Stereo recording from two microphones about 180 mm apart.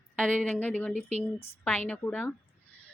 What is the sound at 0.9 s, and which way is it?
Speech, 40° right (ahead or behind).